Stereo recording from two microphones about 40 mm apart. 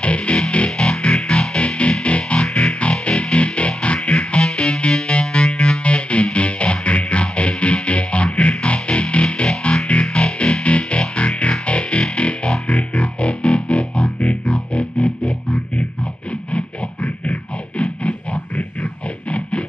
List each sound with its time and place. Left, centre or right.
0.0 s music: left